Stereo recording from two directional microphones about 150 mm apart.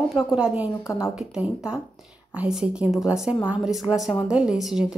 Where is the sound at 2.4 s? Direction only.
5° right (ahead or behind).